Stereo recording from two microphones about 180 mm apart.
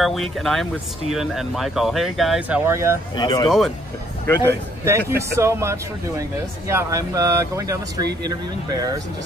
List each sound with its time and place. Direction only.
0.0 s speech: centre (ahead or behind)
2.6 s speech: 15° right (ahead or behind)
3.2 s speech: 20° left (ahead or behind)
3.4 s speech: centre (ahead or behind)
4.8 s speech: 15° right (ahead or behind)